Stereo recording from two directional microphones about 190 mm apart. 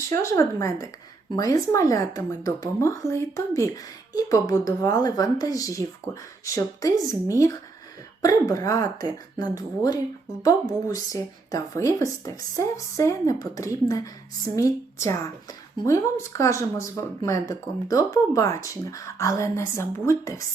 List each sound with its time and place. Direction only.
0.1 s a woman's voice: 15° left (ahead or behind)